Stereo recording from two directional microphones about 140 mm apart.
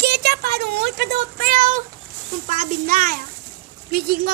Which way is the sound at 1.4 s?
85° right.